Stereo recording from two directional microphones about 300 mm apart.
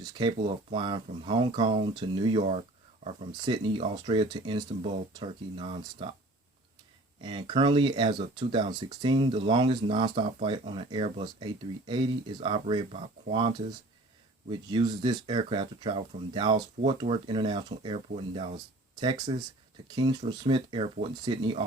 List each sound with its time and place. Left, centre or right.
0.0 s speech: centre
7.2 s speech: centre
14.7 s speech: centre